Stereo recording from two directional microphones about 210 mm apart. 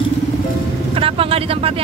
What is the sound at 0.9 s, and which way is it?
Speech, 25° right (ahead or behind).